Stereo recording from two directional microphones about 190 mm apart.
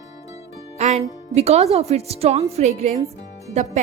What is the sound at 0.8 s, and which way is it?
A woman's voice, 35° right (ahead or behind).